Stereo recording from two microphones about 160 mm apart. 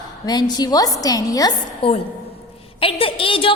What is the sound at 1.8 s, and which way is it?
A woman's voice, 35° left (ahead or behind).